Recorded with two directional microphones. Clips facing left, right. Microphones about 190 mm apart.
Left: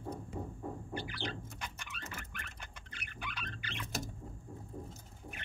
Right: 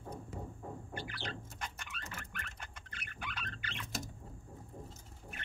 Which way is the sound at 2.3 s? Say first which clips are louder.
Right 1 dB; 50° right (ahead or behind).